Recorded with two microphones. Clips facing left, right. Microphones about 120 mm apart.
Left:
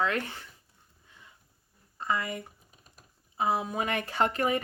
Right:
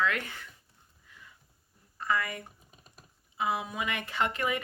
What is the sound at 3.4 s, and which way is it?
Speech, 35° left (ahead or behind).